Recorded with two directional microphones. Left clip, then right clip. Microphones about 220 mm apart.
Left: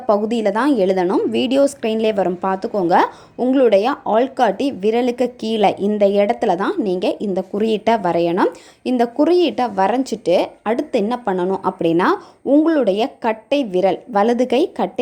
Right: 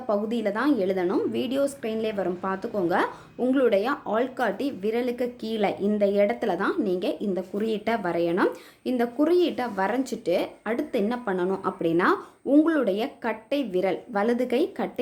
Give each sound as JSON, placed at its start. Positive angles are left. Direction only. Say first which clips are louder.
{"t": 0.1, "sound": "a woman's voice", "louder": "left 9 dB", "side_deg": 30}